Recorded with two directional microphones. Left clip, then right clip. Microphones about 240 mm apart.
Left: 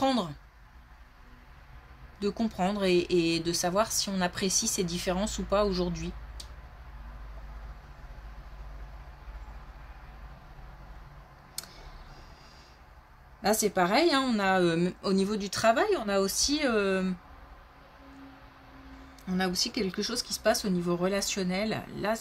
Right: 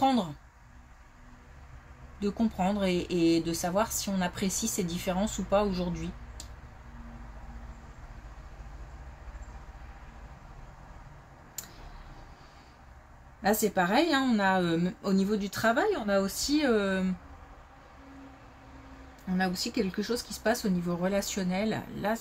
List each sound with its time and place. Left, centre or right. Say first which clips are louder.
0.0 s speech: right 1 dB; left
2.2 s speech: even; left
13.4 s speech: left 1 dB; left
19.3 s speech: left 1 dB; left